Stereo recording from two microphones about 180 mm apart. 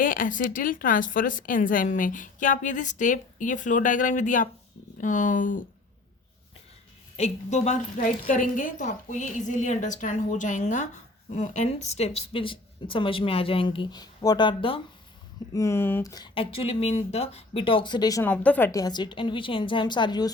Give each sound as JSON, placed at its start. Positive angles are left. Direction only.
{"t": 0.0, "sound": "a woman's voice", "side_deg": 50}
{"t": 7.2, "sound": "a woman's voice", "side_deg": 40}
{"t": 15.5, "sound": "speech", "side_deg": 15}
{"t": 18.2, "sound": "speech", "side_deg": 10}